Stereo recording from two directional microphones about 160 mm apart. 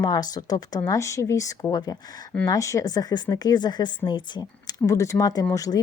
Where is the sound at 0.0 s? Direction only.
25° left (ahead or behind).